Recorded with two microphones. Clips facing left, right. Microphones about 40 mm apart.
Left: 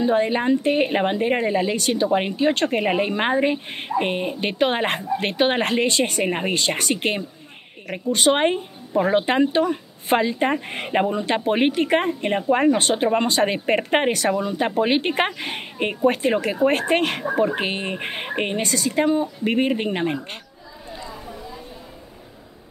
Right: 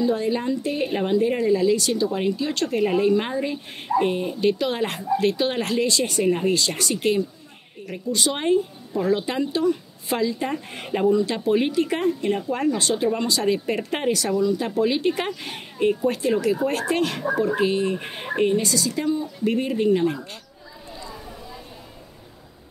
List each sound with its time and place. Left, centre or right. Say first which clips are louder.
0.0 s speech: left 3 dB; left